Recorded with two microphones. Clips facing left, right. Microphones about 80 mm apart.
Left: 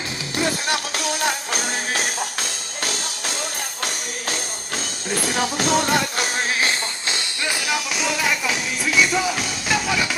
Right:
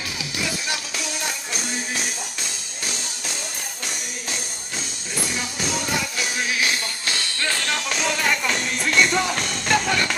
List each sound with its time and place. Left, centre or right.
0.4 s music: left
5.3 s music: left
6.3 s music: left; by 10.1 s centre